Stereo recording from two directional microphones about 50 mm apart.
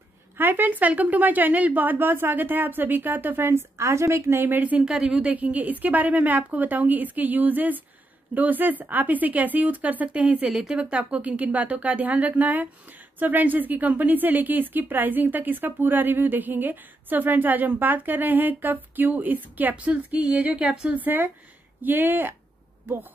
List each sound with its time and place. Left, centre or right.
0.4 s a woman's voice: right
3.7 s a woman's voice: right
4.8 s a woman's voice: centre
5.2 s a woman's voice: right
10.4 s a woman's voice: centre; by 19.7 s right
19.7 s a woman's voice: right